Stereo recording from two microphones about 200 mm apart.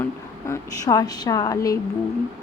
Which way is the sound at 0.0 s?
15° left (ahead or behind).